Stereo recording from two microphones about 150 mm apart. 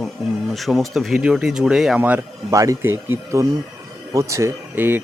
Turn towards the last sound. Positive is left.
turn(degrees=-15)  # may be behind; listen again after turning